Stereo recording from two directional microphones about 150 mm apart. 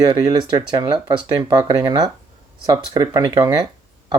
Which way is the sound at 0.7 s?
30° right (ahead or behind).